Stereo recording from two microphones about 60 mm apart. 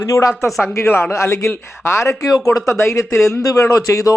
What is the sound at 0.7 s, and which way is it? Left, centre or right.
Speech, left.